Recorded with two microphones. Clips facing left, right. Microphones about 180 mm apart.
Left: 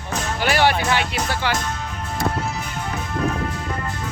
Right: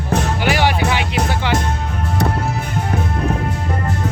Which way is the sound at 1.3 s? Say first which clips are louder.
Right 2 dB; 20° right (ahead or behind).